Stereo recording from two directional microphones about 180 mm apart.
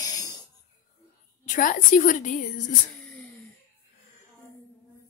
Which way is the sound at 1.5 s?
50° left (ahead or behind).